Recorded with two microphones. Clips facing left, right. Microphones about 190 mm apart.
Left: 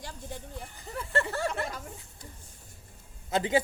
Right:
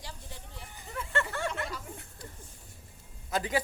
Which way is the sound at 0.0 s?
50° left (ahead or behind).